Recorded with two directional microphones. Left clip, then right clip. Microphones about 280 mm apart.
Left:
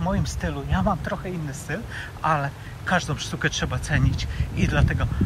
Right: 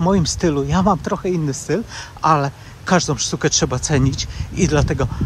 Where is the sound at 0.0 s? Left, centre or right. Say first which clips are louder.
Right 10 dB; right.